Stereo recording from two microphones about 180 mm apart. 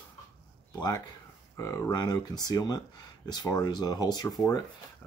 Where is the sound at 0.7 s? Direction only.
20° left (ahead or behind).